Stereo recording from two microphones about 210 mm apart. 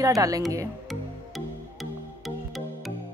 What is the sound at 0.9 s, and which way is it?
Music, centre (ahead or behind).